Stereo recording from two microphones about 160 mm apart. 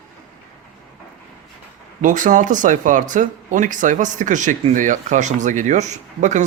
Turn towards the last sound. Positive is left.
turn(degrees=-50)  # may be behind; listen again after turning